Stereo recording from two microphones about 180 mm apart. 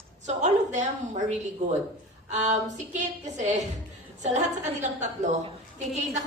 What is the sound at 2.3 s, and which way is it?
A woman's voice, 40° right (ahead or behind).